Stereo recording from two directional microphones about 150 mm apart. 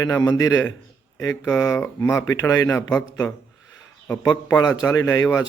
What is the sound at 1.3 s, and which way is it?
Speech, 10° left (ahead or behind).